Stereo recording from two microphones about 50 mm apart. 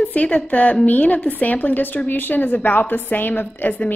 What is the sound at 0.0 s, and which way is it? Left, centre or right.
A woman's voice, left.